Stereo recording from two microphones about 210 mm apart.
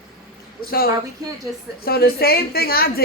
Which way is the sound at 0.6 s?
45° left (ahead or behind).